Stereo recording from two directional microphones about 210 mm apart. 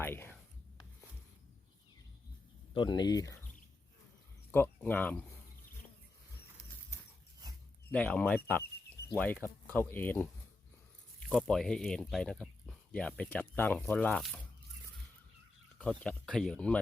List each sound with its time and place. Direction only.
0.0 s whispering: 10° left (ahead or behind)
2.7 s speech: 20° left (ahead or behind)
4.5 s speech: 10° left (ahead or behind)
7.9 s speech: 5° left (ahead or behind)
11.3 s speech: centre (ahead or behind)
15.8 s speech: 5° left (ahead or behind)